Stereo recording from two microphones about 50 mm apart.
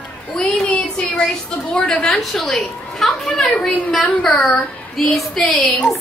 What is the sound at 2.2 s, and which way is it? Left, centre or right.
A woman's voice, centre.